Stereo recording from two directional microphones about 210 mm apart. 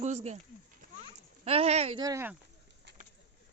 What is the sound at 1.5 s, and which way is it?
Speech, 30° right (ahead or behind).